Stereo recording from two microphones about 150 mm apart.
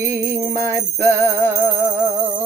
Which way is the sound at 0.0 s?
20° right (ahead or behind).